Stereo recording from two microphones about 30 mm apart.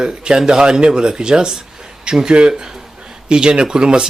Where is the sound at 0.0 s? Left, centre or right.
Right.